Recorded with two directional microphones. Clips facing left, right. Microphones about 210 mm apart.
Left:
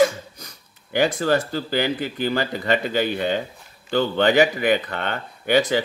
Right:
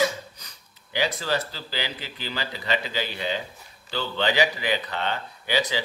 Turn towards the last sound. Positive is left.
turn(degrees=55)  # may be behind; listen again after turning